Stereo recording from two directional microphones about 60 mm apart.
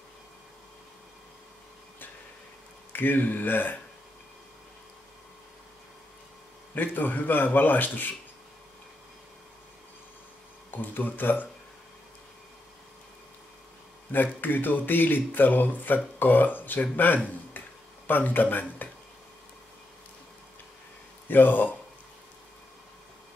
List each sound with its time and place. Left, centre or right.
2.9 s speech: left
6.7 s speech: left
10.7 s speech: left
14.1 s speech: left
16.9 s a sound: left
21.3 s speech: left